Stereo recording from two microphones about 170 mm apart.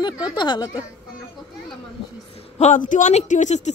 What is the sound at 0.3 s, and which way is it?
Speech, 25° left (ahead or behind).